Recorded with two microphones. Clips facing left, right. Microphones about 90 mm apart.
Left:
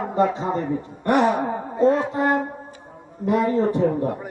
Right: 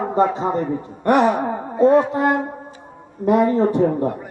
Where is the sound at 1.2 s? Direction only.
15° right (ahead or behind).